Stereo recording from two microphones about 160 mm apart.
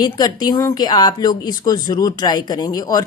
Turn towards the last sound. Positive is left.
turn(degrees=25)  # may be behind; listen again after turning